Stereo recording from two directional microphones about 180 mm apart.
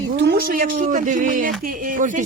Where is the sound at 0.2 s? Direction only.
60° right (ahead or behind).